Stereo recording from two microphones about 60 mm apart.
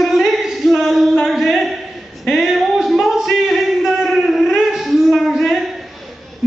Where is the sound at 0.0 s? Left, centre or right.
Centre.